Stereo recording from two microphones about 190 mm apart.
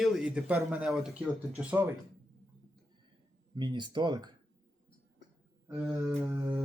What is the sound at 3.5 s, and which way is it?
Speech, 25° right (ahead or behind).